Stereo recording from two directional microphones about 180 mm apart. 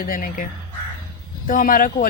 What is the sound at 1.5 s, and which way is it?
Speech, 50° left (ahead or behind).